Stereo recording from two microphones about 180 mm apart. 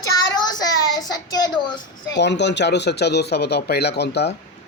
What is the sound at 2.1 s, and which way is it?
Speech, 75° left (ahead or behind).